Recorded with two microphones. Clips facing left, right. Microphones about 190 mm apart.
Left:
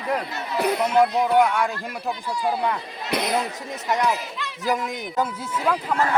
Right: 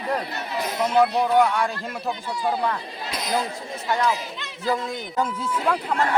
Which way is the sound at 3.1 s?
60° left (ahead or behind).